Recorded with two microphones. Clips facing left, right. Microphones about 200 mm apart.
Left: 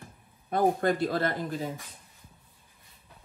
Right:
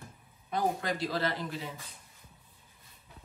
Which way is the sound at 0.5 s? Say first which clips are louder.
Left 7 dB; 50° left (ahead or behind).